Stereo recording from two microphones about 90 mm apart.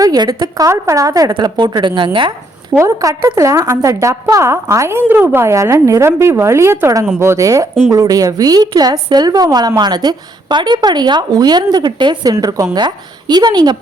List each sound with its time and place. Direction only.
0.0 s a woman's voice: 45° right (ahead or behind)
1.3 s a woman's voice: 55° right (ahead or behind)
2.7 s a woman's voice: 35° right (ahead or behind); by 12.3 s 55° right (ahead or behind)
12.3 s a woman's voice: 40° right (ahead or behind)
12.7 s a woman's voice: 55° right (ahead or behind)